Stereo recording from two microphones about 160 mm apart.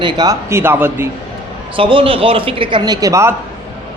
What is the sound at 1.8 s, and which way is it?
A man's voice, 35° right (ahead or behind).